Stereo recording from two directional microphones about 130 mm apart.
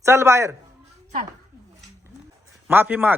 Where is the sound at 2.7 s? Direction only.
15° right (ahead or behind).